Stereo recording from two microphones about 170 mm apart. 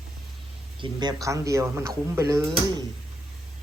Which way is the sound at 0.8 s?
25° right (ahead or behind).